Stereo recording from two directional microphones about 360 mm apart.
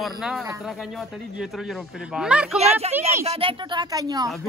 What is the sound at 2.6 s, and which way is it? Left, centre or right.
Speech, centre.